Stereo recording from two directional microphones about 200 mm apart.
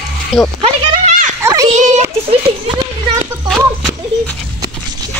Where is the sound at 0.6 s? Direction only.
40° right (ahead or behind).